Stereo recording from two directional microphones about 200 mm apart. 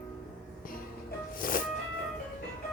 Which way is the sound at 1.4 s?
45° left (ahead or behind).